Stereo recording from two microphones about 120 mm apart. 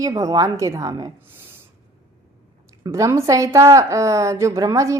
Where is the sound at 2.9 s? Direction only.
25° right (ahead or behind).